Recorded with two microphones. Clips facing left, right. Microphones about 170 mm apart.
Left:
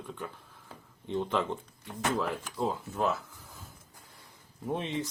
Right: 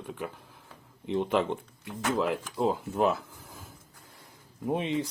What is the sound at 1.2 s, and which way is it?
Speech, 15° right (ahead or behind).